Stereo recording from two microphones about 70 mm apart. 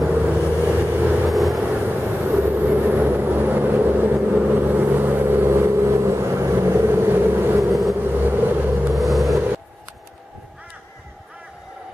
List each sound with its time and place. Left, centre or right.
0.1 s vehicle: right
1.2 s vehicle: centre
1.6 s vehicle: right
8.9 s vehicle: centre